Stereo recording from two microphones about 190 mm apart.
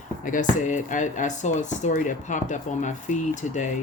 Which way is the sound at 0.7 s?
40° left (ahead or behind).